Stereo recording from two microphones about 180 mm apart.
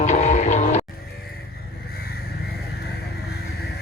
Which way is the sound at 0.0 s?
40° left (ahead or behind).